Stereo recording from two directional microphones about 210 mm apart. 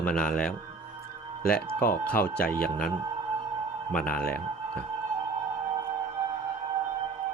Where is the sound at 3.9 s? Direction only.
5° left (ahead or behind).